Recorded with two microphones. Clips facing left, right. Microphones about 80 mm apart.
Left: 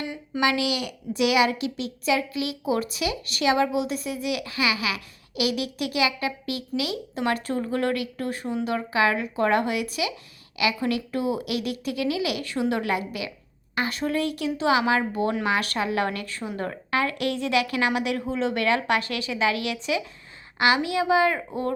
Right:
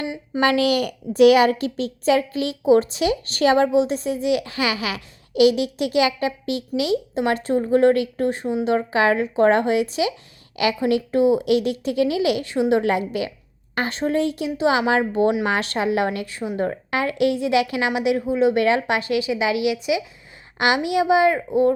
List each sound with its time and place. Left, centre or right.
0.3 s a woman's voice: right; by 21.7 s centre